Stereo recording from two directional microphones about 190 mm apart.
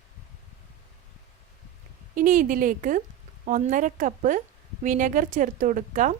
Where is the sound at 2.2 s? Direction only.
45° right (ahead or behind).